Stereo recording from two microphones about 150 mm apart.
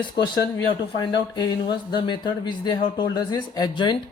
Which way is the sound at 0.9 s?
30° left (ahead or behind).